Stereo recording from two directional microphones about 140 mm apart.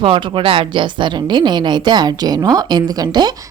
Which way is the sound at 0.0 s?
40° right (ahead or behind).